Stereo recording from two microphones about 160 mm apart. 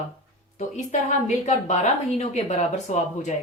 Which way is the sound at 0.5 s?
45° left (ahead or behind).